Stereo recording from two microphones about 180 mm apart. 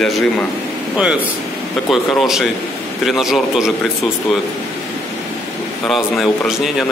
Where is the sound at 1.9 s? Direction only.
Centre (ahead or behind).